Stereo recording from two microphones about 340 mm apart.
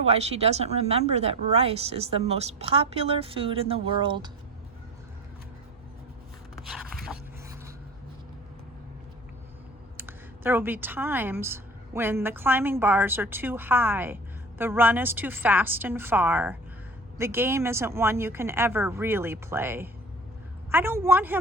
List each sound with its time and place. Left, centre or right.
0.0 s a woman's voice: centre
6.6 s a sound: centre
10.0 s a woman's voice: centre